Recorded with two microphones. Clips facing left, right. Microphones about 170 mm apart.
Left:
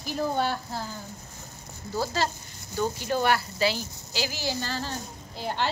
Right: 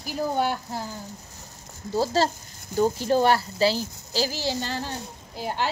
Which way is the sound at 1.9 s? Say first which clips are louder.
Right 5 dB; 30° right (ahead or behind).